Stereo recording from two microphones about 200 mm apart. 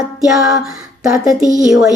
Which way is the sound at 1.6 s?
Centre (ahead or behind).